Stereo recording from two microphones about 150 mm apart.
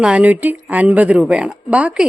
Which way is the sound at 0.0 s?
10° right (ahead or behind).